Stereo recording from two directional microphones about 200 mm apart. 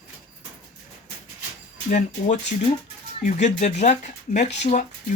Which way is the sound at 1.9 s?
35° left (ahead or behind).